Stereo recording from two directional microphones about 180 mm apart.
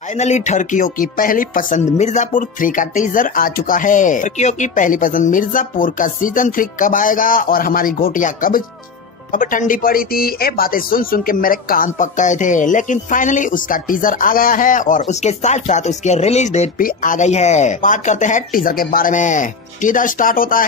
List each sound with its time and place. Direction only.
0.2 s speech: 40° left (ahead or behind)